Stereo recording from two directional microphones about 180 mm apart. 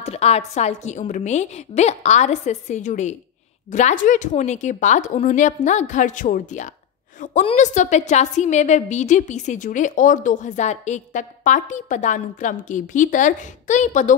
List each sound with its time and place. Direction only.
0.0 s a woman's voice: 35° left (ahead or behind)